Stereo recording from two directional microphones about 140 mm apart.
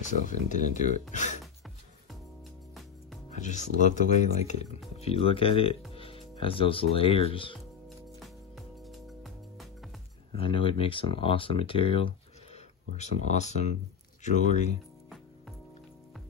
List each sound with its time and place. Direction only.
0.2 s speech: 60° left (ahead or behind)
1.1 s music: 60° left (ahead or behind)
3.3 s speech: 60° left (ahead or behind); by 7.5 s 40° left (ahead or behind)
8.2 s music: centre (ahead or behind)
10.3 s speech: 40° left (ahead or behind)
12.9 s speech: 55° left (ahead or behind)